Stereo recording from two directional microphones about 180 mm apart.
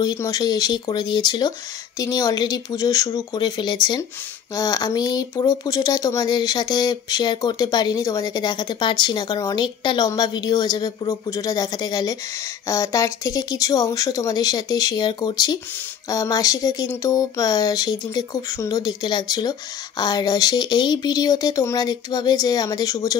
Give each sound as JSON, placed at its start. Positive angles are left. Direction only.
{"t": 0.0, "sound": "speech", "side_deg": 20}